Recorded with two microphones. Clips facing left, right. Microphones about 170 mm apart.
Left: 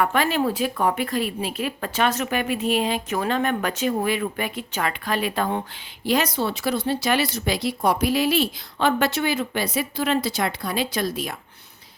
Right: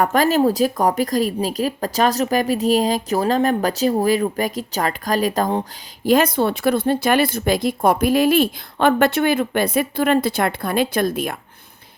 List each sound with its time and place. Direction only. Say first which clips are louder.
0.0 s a woman's voice: right 5 dB; 40° right (ahead or behind)
6.1 s speech: right 6 dB; 50° right (ahead or behind)